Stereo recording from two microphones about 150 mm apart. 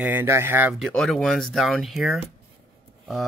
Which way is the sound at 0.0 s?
15° right (ahead or behind).